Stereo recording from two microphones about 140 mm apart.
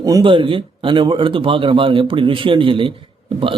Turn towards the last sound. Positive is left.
turn(degrees=-40)  # may be behind; listen again after turning